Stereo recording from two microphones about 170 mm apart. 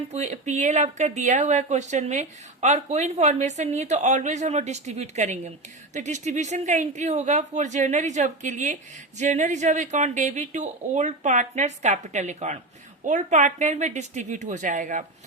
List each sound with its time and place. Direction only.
0.1 s speech: 40° right (ahead or behind)